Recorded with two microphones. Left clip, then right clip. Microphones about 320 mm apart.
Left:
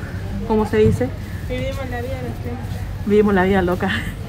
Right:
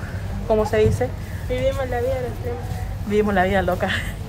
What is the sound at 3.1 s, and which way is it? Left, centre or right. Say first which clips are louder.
A woman's voice: left 3 dB; centre.